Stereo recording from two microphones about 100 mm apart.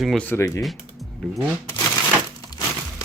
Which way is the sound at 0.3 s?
30° left (ahead or behind).